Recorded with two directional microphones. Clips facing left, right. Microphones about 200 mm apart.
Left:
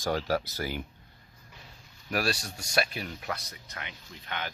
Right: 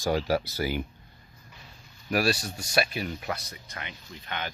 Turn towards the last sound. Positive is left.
turn(degrees=0)  # may be behind; listen again after turning